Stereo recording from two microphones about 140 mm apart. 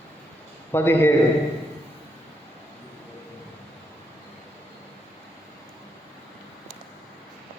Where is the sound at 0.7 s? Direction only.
15° left (ahead or behind).